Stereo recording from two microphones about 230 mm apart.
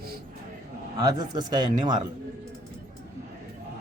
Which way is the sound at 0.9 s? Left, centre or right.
Centre.